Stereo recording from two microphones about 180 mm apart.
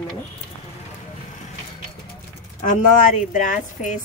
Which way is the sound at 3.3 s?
45° left (ahead or behind).